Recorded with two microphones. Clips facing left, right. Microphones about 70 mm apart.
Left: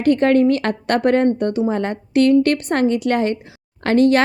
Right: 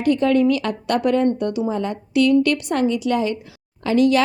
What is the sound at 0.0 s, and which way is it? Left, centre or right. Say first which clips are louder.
A woman's voice: left 3 dB; left.